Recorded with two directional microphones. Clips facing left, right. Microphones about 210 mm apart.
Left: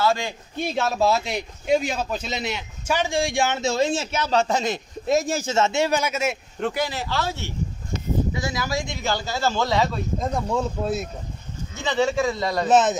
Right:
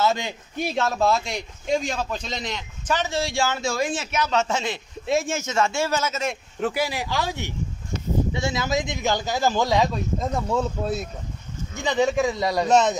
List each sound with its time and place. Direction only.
0.0 s a man's voice: 20° right (ahead or behind)
0.7 s a man's voice: 5° left (ahead or behind)
6.6 s speech: 10° right (ahead or behind)
8.3 s speech: 25° right (ahead or behind)
10.1 s speech: centre (ahead or behind)
11.7 s speech: 15° right (ahead or behind)
12.6 s speech: 5° left (ahead or behind)